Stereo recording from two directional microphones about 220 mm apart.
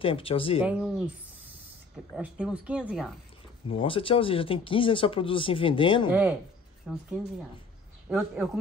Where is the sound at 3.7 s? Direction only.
25° left (ahead or behind).